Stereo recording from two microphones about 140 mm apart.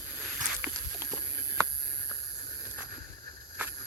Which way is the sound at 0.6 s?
15° right (ahead or behind).